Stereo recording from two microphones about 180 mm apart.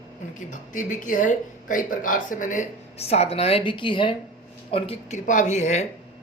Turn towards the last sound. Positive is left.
turn(degrees=40)  # may be behind; listen again after turning